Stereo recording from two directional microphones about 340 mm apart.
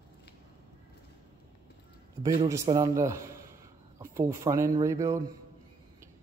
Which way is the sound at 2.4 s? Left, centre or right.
Centre.